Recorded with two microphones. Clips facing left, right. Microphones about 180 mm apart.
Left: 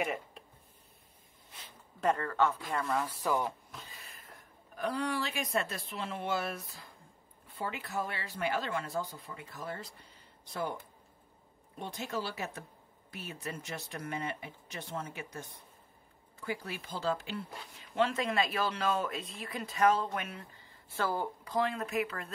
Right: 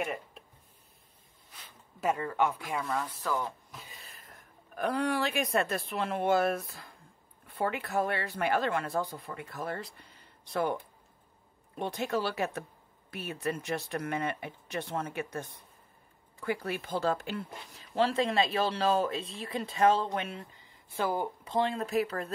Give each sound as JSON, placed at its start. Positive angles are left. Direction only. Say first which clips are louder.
{"t": 0.0, "sound": "speech", "louder": "even", "side_deg": 0}
{"t": 2.0, "sound": "a woman's voice", "louder": "even", "side_deg": -10}
{"t": 3.2, "sound": "speech", "louder": "left 1 dB", "side_deg": 15}
{"t": 4.7, "sound": "speech", "louder": "right 4 dB", "side_deg": -60}
{"t": 11.8, "sound": "speech", "louder": "right 6 dB", "side_deg": -65}
{"t": 16.4, "sound": "speech", "louder": "right 6 dB", "side_deg": -60}
{"t": 17.7, "sound": "speech", "louder": "right 3 dB", "side_deg": -35}